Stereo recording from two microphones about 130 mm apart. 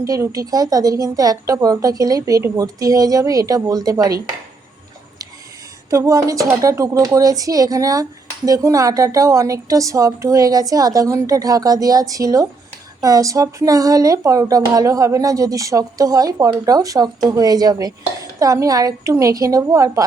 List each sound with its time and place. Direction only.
0.0 s a woman's voice: 25° right (ahead or behind)
5.9 s a woman's voice: 25° right (ahead or behind)